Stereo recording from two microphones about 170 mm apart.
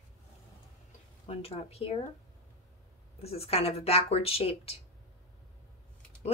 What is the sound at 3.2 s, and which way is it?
Speech, 35° left (ahead or behind).